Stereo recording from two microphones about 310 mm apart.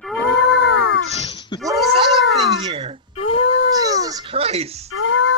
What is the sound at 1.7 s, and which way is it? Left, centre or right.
Cat, centre.